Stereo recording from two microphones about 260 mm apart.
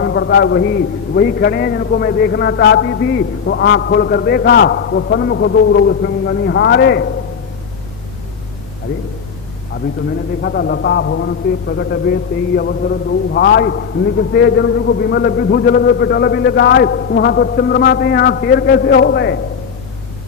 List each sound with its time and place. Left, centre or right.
0.0 s a man's voice: left
10.4 s a man's voice: left